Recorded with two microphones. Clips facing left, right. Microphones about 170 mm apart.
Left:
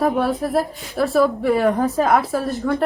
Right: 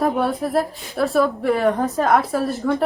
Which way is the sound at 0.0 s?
Centre (ahead or behind).